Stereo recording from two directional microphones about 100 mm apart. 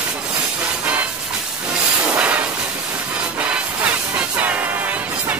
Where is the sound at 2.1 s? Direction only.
15° right (ahead or behind).